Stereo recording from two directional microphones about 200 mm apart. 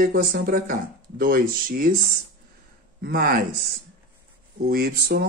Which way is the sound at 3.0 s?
45° right (ahead or behind).